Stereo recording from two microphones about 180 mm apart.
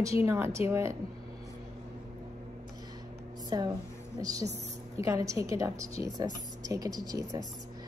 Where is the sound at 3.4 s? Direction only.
20° right (ahead or behind).